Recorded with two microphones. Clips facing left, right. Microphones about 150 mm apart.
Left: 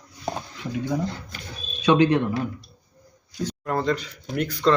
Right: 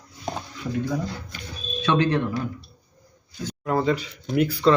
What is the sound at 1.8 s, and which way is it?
Speech, 15° left (ahead or behind).